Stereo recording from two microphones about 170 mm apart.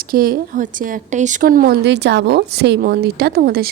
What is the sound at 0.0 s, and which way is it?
Speech, 60° right (ahead or behind).